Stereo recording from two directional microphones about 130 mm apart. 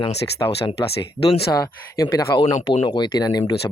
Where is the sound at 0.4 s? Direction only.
30° left (ahead or behind).